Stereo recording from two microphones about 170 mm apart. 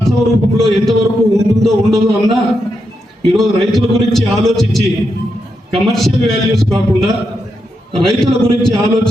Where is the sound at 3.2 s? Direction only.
Centre (ahead or behind).